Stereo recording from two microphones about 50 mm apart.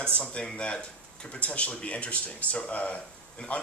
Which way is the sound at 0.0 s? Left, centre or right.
Centre.